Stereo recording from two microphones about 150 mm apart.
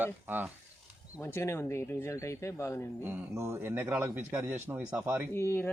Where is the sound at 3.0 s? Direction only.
15° right (ahead or behind).